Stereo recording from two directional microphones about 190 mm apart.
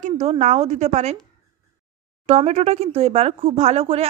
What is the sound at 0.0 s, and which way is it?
A woman's voice, 35° right (ahead or behind).